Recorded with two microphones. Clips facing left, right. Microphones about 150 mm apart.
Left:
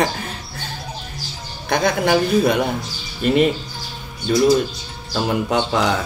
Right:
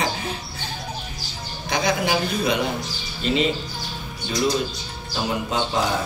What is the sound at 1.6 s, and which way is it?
Speech, 55° left (ahead or behind).